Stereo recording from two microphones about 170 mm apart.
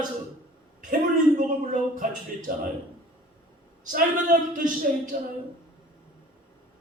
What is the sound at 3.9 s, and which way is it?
Speech, 50° right (ahead or behind).